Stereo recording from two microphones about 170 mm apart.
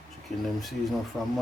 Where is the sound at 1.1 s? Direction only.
5° left (ahead or behind).